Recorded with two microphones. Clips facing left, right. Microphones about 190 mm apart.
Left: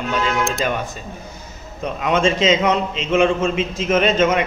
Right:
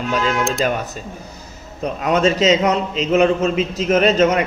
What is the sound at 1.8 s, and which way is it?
A man's voice, 40° right (ahead or behind).